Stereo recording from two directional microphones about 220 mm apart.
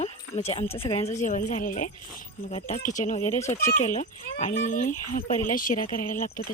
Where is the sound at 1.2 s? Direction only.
35° left (ahead or behind).